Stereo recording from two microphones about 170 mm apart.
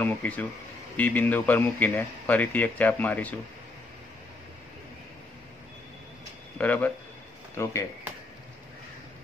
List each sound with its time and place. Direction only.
0.0 s a man's voice: 10° left (ahead or behind)
6.6 s a man's voice: 10° left (ahead or behind)